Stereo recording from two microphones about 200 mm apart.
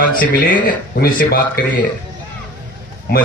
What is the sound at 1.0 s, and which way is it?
Speech, 50° left (ahead or behind).